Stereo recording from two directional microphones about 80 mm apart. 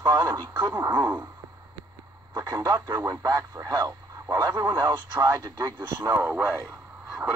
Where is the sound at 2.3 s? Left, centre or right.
Right.